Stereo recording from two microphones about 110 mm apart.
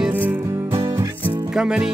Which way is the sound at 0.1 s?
15° right (ahead or behind).